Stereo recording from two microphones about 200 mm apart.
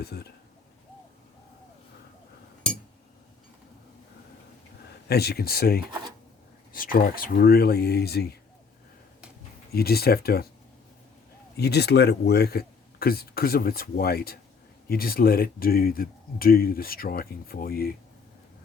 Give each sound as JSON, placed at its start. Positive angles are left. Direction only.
{"t": 0.0, "sound": "speech", "side_deg": 55}
{"t": 5.0, "sound": "speech", "side_deg": 50}
{"t": 9.7, "sound": "speech", "side_deg": 50}
{"t": 11.5, "sound": "speech", "side_deg": 55}